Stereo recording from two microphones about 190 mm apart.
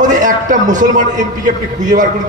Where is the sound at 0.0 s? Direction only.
40° right (ahead or behind).